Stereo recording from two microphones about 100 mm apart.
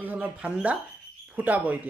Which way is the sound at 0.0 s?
15° right (ahead or behind).